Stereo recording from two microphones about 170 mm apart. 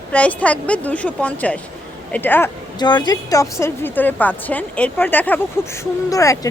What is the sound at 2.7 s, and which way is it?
A woman's voice, 25° left (ahead or behind).